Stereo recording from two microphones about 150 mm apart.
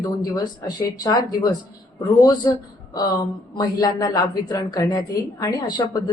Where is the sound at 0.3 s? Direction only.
25° left (ahead or behind).